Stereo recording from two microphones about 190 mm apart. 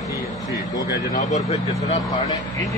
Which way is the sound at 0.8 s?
15° right (ahead or behind).